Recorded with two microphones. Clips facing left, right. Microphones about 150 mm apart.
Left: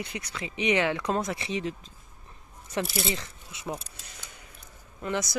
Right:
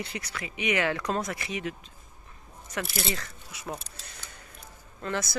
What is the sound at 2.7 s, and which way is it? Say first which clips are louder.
Speech: left 3 dB; 25° left (ahead or behind).